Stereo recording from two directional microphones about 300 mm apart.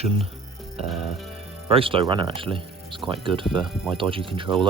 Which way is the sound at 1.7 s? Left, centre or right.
Centre.